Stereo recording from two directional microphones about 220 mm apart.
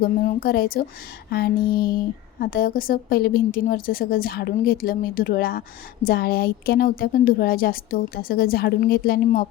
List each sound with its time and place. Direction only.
0.0 s speech: 40° left (ahead or behind)